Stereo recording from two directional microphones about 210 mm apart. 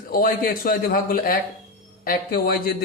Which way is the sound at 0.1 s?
45° left (ahead or behind).